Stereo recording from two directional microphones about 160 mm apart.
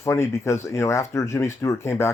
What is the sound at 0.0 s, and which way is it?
Speech, 15° left (ahead or behind).